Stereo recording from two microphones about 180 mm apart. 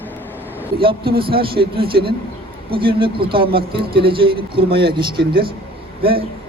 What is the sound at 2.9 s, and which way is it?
Speech, 30° right (ahead or behind).